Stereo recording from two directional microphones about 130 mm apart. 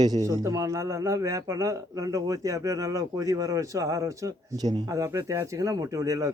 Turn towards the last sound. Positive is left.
turn(degrees=-25)  # may be behind; listen again after turning